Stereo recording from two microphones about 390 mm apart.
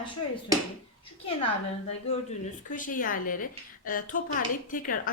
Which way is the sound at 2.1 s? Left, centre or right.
Centre.